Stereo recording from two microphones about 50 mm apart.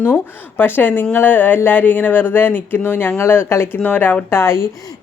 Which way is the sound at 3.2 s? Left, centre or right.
Left.